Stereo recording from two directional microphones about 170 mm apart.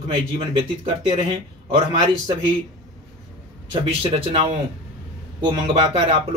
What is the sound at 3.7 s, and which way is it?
Speech, 30° right (ahead or behind).